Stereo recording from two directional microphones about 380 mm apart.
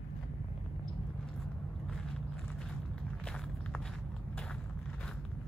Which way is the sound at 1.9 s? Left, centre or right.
Centre.